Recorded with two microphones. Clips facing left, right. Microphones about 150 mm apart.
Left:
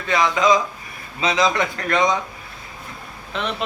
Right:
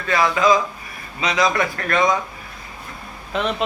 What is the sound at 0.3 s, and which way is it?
Speech, 20° left (ahead or behind).